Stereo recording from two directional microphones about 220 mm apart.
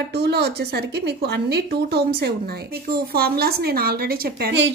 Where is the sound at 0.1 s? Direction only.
50° right (ahead or behind).